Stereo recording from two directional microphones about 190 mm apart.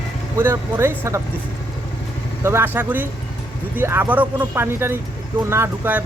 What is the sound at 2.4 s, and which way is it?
Speech, 10° right (ahead or behind).